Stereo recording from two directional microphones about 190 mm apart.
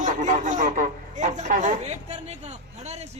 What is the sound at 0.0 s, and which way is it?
A woman's voice, 40° right (ahead or behind).